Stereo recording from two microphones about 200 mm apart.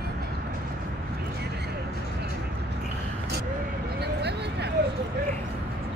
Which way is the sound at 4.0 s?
55° right (ahead or behind).